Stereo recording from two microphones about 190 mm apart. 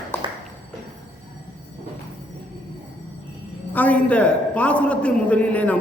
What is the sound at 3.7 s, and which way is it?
A man's voice, 10° left (ahead or behind).